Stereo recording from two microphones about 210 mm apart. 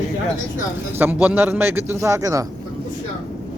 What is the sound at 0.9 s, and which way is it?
A man's voice, 10° right (ahead or behind).